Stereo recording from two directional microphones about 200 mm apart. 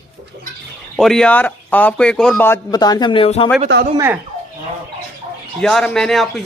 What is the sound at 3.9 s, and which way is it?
Speech, 15° right (ahead or behind).